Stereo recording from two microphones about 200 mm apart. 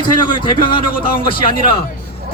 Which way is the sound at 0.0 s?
20° left (ahead or behind).